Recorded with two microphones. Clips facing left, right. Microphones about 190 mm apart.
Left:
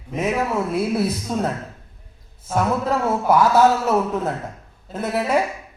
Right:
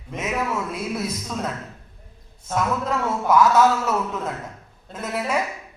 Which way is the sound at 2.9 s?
30° left (ahead or behind).